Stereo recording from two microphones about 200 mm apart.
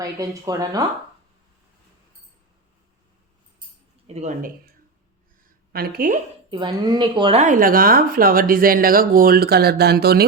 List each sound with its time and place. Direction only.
0.0 s speech: 20° right (ahead or behind)
4.0 s speech: 35° right (ahead or behind)
5.7 s speech: 50° right (ahead or behind)
6.5 s speech: 20° right (ahead or behind); by 10.2 s 50° right (ahead or behind)